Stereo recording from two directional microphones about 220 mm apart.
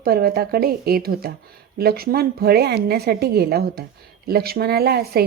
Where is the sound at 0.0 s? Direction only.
45° right (ahead or behind).